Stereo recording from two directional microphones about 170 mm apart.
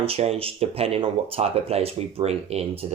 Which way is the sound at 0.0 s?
35° right (ahead or behind).